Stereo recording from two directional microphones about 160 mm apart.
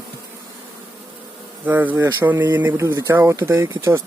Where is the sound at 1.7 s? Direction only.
10° right (ahead or behind).